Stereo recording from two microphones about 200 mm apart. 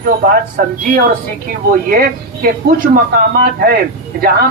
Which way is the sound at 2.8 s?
45° right (ahead or behind).